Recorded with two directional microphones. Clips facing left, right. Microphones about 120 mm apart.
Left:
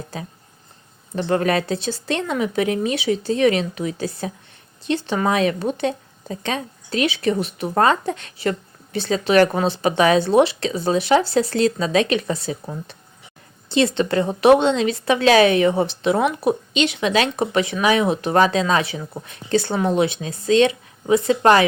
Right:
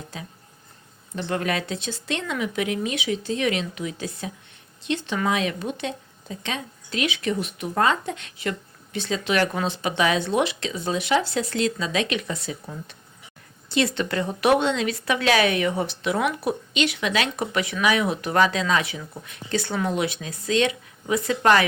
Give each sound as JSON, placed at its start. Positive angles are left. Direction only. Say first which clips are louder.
{"t": 0.1, "sound": "speech", "louder": "left 5 dB", "side_deg": 40}